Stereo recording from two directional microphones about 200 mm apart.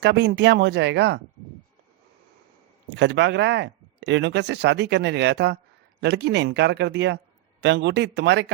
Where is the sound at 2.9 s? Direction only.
60° right (ahead or behind).